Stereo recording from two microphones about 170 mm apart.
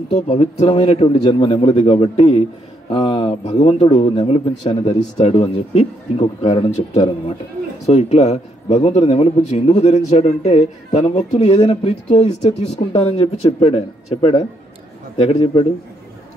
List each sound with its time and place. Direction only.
0.1 s a man's voice: 40° left (ahead or behind)